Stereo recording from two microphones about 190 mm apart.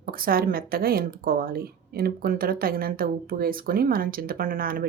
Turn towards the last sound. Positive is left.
turn(degrees=-50)  # may be behind; listen again after turning